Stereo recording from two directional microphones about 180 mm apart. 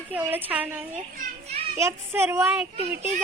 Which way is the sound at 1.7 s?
15° right (ahead or behind).